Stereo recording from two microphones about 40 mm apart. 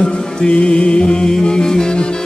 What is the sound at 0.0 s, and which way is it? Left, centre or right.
Music, left.